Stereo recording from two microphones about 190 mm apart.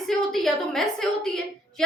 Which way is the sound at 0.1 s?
Centre (ahead or behind).